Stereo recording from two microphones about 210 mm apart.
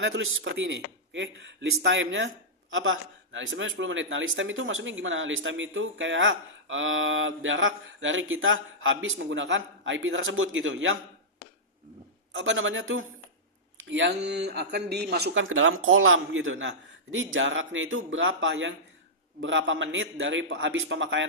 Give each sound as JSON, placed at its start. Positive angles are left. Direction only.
{"t": 0.0, "sound": "speech", "side_deg": -65}
{"t": 12.3, "sound": "a man's voice", "side_deg": -65}
{"t": 15.4, "sound": "a man's voice", "side_deg": -70}